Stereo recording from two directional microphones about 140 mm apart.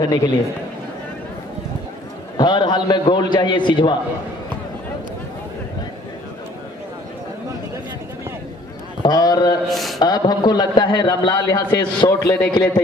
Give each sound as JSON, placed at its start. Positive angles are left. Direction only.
{"t": 0.0, "sound": "a man's voice", "side_deg": 30}
{"t": 2.3, "sound": "a man's voice", "side_deg": 30}
{"t": 9.0, "sound": "a man's voice", "side_deg": 30}
{"t": 9.7, "sound": "a man's voice", "side_deg": 0}
{"t": 9.9, "sound": "a man's voice", "side_deg": 30}